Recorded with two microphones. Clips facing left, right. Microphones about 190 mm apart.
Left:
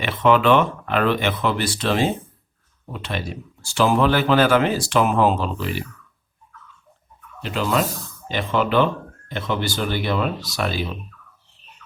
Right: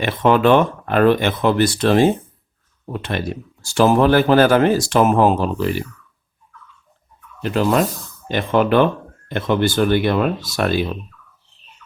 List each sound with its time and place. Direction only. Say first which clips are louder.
0.0 s speech: right 3 dB; 45° right (ahead or behind)
7.4 s speech: right 5 dB; 50° right (ahead or behind)